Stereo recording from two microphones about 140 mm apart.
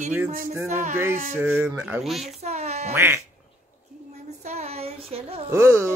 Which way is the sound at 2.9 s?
15° right (ahead or behind).